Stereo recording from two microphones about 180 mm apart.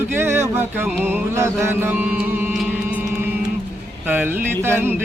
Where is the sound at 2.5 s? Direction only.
5° right (ahead or behind).